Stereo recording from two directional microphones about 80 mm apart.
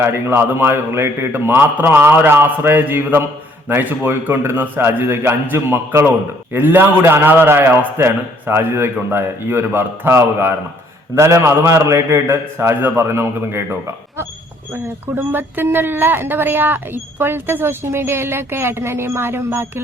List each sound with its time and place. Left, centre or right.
0.0 s a woman's voice: right